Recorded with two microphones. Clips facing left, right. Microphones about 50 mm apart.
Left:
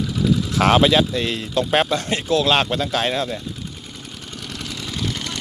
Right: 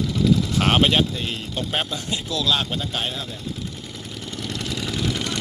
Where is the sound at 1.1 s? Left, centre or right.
Left.